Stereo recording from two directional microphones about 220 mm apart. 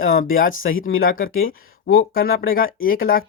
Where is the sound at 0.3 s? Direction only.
40° left (ahead or behind).